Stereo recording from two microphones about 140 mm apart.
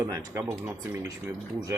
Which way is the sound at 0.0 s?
20° right (ahead or behind).